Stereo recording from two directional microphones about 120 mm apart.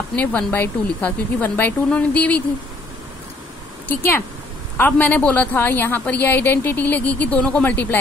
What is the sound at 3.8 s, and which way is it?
A woman's voice, 20° left (ahead or behind).